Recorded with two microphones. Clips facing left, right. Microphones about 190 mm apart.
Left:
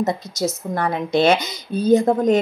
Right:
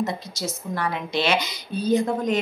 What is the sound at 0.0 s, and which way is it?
A woman's voice, 45° left (ahead or behind).